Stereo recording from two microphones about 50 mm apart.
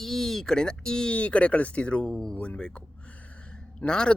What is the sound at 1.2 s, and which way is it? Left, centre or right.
Speech, left.